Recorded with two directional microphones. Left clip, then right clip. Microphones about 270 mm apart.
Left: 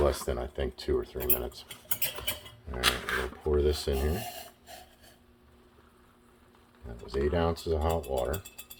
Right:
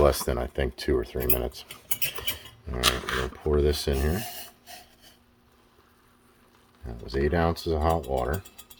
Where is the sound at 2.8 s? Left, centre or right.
Centre.